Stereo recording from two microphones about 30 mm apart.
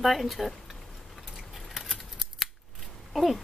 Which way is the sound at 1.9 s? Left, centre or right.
Centre.